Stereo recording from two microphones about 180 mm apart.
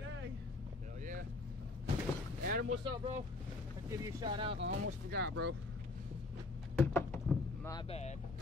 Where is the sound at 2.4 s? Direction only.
50° right (ahead or behind).